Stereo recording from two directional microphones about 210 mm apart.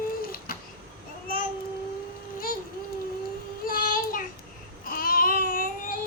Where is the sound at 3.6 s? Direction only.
40° left (ahead or behind).